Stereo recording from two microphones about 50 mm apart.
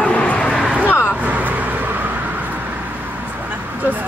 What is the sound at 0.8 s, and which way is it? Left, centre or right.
Vehicle, left.